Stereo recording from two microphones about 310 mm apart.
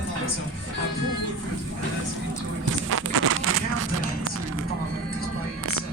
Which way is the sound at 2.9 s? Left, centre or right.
Right.